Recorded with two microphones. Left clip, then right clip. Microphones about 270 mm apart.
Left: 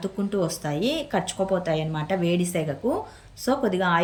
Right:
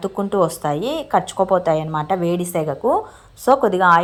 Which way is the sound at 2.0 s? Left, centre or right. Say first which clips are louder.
Right 5 dB; right.